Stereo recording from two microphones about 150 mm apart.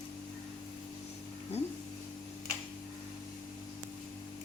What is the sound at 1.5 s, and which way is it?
Speech, 45° left (ahead or behind).